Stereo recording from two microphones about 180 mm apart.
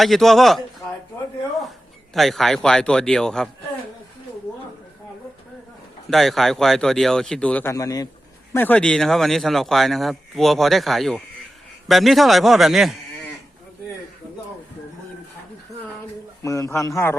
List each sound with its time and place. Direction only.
0.0 s speech: centre (ahead or behind)
2.1 s speech: centre (ahead or behind)
6.1 s speech: centre (ahead or behind)
16.4 s a man's voice: 15° left (ahead or behind)